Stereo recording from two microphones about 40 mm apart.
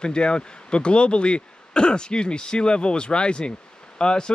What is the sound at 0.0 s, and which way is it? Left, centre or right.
Speech, left.